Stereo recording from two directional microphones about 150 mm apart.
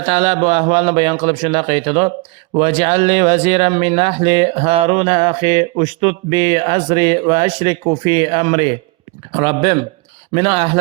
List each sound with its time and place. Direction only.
0.0 s a man's voice: 45° right (ahead or behind)